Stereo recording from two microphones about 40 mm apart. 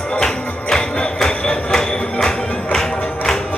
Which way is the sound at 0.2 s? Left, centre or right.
Centre.